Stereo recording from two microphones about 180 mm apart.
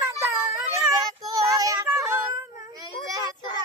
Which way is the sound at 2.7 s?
20° right (ahead or behind).